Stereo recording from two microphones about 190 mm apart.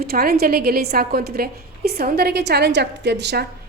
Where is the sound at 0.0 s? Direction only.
55° right (ahead or behind).